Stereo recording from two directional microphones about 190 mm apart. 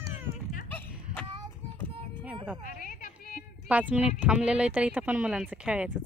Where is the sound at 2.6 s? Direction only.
45° left (ahead or behind).